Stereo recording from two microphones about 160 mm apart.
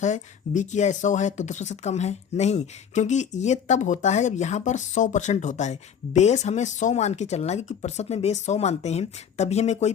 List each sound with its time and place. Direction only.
0.0 s speech: 50° left (ahead or behind)